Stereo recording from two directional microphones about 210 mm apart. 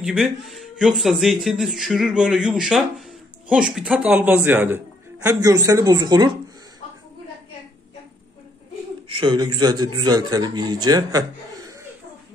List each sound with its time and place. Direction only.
0.0 s a man's voice: centre (ahead or behind); by 6.3 s 20° right (ahead or behind)
9.1 s a man's voice: 20° right (ahead or behind)